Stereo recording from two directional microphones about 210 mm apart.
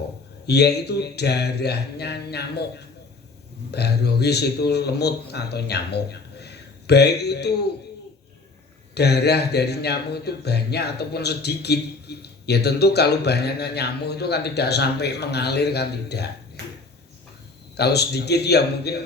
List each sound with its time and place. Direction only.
0.4 s speech: 50° left (ahead or behind)
3.7 s speech: 50° left (ahead or behind)
9.0 s speech: 50° left (ahead or behind)
17.7 s speech: 50° left (ahead or behind)